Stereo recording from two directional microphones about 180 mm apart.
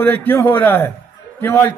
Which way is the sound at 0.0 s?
10° left (ahead or behind).